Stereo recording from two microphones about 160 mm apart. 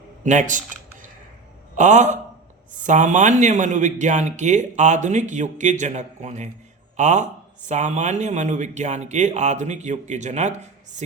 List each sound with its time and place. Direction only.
0.2 s speech: 50° right (ahead or behind)
1.7 s a man's voice: 50° right (ahead or behind)